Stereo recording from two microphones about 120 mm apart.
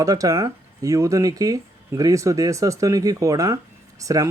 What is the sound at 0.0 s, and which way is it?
Speech, 30° right (ahead or behind).